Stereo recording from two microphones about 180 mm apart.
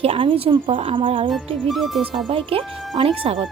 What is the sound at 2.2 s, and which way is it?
Speech, 30° right (ahead or behind).